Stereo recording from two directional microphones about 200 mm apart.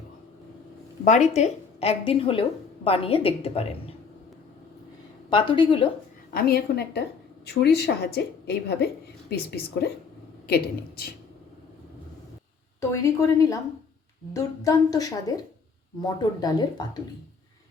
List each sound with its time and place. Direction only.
1.0 s a woman's voice: 35° left (ahead or behind)
5.3 s a woman's voice: 25° left (ahead or behind)
6.3 s a woman's voice: 50° left (ahead or behind)
12.9 s a woman's voice: 15° left (ahead or behind)